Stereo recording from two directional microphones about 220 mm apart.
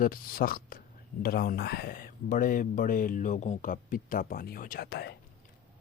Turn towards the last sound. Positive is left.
turn(degrees=45)  # may be behind; listen again after turning